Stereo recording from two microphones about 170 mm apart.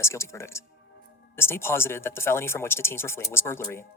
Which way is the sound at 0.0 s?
15° left (ahead or behind).